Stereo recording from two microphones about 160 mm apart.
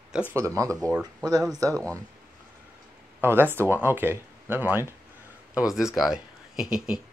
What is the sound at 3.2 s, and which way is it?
Speech, 15° right (ahead or behind).